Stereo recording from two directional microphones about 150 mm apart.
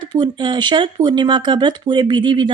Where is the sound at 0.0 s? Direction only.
30° right (ahead or behind).